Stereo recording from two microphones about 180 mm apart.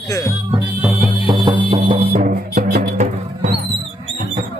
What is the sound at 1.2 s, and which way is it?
Music, 25° right (ahead or behind).